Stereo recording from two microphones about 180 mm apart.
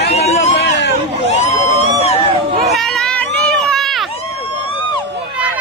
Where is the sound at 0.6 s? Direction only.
75° left (ahead or behind).